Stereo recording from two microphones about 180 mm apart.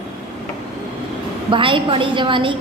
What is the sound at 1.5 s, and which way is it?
A woman's voice, 25° right (ahead or behind).